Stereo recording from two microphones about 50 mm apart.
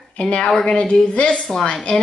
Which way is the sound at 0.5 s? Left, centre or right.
Centre.